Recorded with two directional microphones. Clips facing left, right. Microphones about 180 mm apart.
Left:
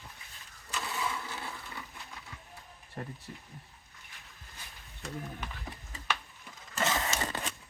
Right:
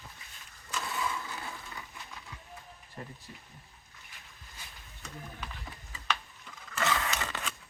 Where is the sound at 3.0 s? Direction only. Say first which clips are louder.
Left 4 dB; 55° left (ahead or behind).